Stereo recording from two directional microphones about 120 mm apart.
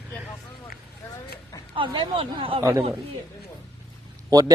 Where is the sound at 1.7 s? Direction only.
45° right (ahead or behind).